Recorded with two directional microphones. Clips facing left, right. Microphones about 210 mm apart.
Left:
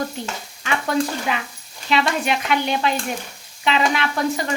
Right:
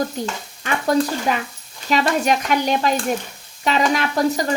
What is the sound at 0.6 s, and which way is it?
Speech, 40° right (ahead or behind).